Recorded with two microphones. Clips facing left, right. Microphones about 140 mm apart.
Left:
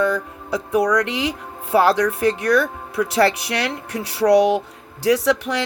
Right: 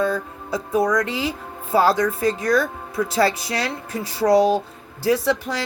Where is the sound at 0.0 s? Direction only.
75° left (ahead or behind).